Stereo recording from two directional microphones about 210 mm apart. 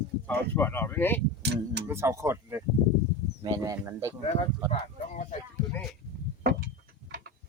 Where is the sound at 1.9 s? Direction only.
15° right (ahead or behind).